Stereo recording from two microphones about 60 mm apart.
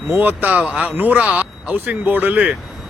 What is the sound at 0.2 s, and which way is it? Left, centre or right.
Speech, right.